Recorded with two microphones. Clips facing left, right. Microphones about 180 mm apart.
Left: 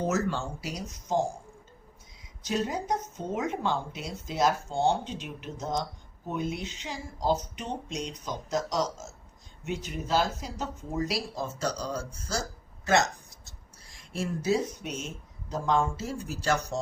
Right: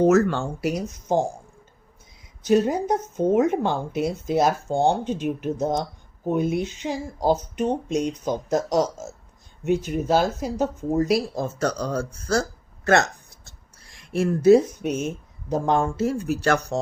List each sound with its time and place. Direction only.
0.0 s speech: 60° right (ahead or behind)
2.4 s speech: 55° right (ahead or behind)